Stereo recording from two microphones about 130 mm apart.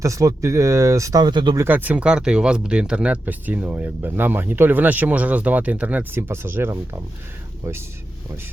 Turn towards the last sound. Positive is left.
turn(degrees=-20)  # may be behind; listen again after turning